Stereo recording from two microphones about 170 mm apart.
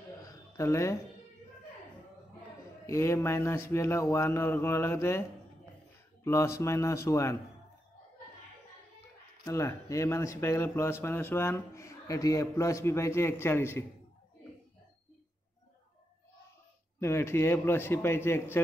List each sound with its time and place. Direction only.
0.2 s a sound: 20° left (ahead or behind)
2.9 s speech: 15° left (ahead or behind)
6.2 s speech: 15° left (ahead or behind)
9.4 s speech: 15° left (ahead or behind)
17.0 s speech: 15° left (ahead or behind)